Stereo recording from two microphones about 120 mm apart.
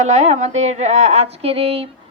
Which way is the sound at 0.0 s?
70° right (ahead or behind).